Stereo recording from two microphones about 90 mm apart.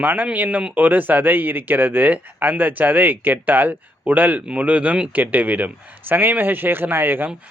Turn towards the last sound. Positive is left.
turn(degrees=-20)  # may be behind; listen again after turning